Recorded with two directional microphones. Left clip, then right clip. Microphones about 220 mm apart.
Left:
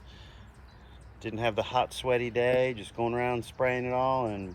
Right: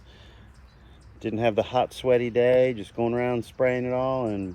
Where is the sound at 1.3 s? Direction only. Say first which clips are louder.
Right 6 dB; 25° right (ahead or behind).